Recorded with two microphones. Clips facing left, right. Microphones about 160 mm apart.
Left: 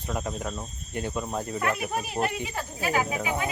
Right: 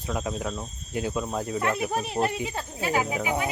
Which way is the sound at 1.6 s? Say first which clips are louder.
Right 2 dB; 25° right (ahead or behind).